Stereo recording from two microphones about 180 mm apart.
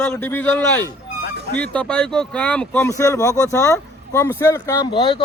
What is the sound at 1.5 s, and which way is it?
Speech, 5° left (ahead or behind).